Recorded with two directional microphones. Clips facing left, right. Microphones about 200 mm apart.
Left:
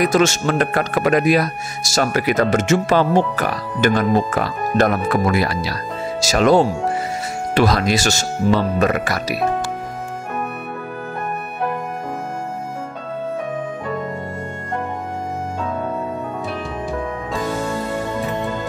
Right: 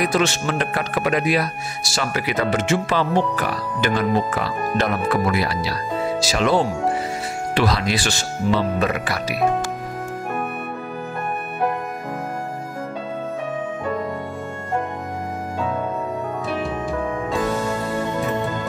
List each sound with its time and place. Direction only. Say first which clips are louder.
0.0 s speech: left 4 dB; 45° left (ahead or behind)